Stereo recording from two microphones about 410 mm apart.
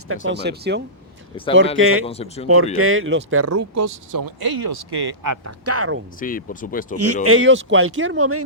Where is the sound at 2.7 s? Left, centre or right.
Right.